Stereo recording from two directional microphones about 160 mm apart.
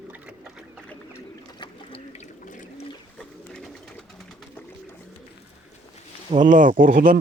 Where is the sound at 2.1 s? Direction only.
55° left (ahead or behind).